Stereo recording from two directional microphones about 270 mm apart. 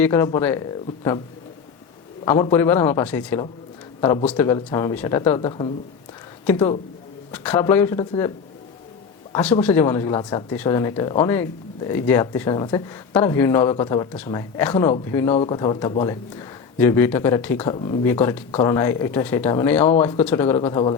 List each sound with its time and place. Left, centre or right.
0.0 s speech: centre
2.2 s speech: centre
9.3 s speech: centre